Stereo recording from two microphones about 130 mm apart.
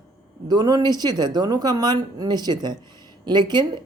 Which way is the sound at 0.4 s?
30° right (ahead or behind).